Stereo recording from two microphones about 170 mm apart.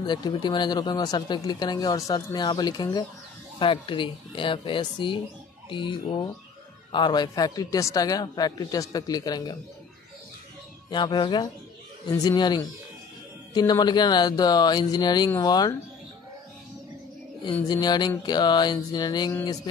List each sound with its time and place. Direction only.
0.0 s speech: 25° left (ahead or behind)
10.9 s speech: 25° left (ahead or behind)
17.5 s speech: 25° left (ahead or behind)